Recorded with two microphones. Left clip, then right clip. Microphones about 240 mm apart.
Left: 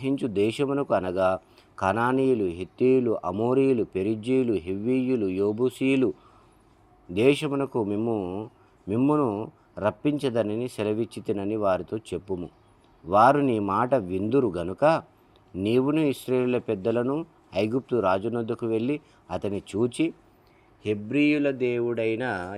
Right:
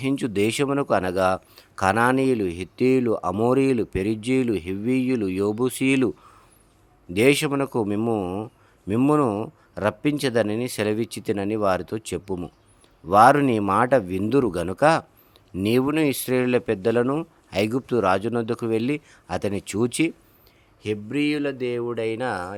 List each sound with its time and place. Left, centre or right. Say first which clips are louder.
0.0 s a man's voice: right 2 dB; right
20.8 s speech: left 1 dB; centre